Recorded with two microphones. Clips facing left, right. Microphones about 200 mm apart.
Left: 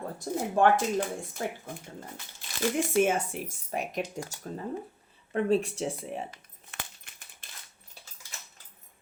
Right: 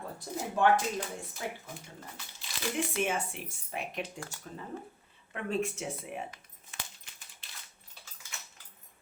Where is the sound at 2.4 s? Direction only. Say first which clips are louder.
Left 5 dB; 45° left (ahead or behind).